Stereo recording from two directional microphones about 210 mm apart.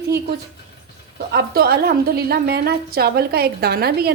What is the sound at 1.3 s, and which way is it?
A woman's voice, 45° right (ahead or behind).